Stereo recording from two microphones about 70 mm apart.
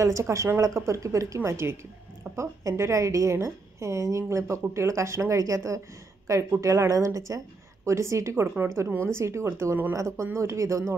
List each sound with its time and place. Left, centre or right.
0.0 s a woman's voice: right